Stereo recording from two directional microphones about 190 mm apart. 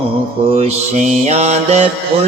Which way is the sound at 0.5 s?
35° right (ahead or behind).